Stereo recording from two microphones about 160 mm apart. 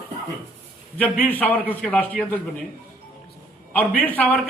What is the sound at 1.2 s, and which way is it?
A man's voice, 10° left (ahead or behind).